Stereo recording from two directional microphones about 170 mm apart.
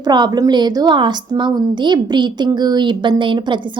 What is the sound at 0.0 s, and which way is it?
A woman's voice, 25° right (ahead or behind).